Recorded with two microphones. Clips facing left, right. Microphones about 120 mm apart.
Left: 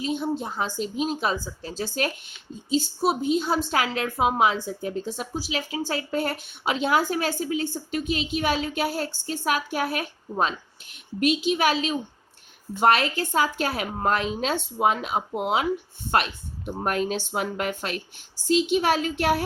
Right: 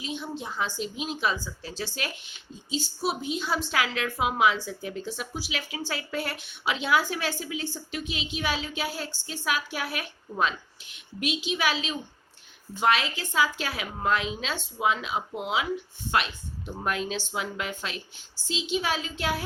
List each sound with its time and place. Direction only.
0.0 s a woman's voice: 45° left (ahead or behind); by 19.5 s 65° left (ahead or behind)